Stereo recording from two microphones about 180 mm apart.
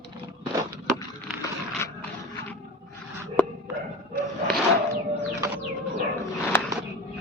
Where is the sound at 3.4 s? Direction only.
10° left (ahead or behind).